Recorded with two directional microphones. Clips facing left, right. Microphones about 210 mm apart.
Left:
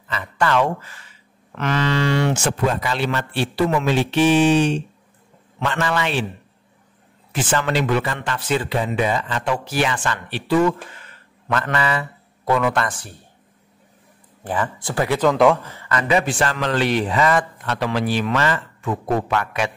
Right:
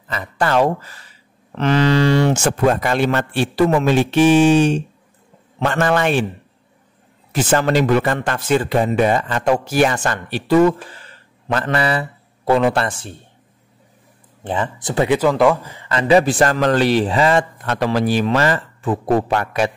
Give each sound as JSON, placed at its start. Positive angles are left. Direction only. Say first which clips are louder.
{"t": 0.1, "sound": "speech", "louder": "right 2 dB", "side_deg": -40}
{"t": 7.3, "sound": "speech", "louder": "right 5 dB", "side_deg": -40}
{"t": 14.4, "sound": "speech", "louder": "right 2 dB", "side_deg": -25}
{"t": 15.2, "sound": "a man's voice", "louder": "right 1 dB", "side_deg": 0}
{"t": 15.7, "sound": "speech", "louder": "right 6 dB", "side_deg": -25}
{"t": 17.6, "sound": "speech", "louder": "right 5 dB", "side_deg": -45}